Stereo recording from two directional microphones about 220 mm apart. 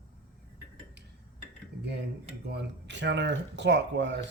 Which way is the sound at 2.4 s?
50° right (ahead or behind).